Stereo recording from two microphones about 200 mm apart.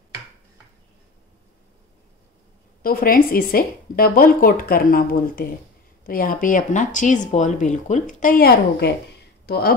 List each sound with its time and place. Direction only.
2.8 s a woman's voice: 45° left (ahead or behind)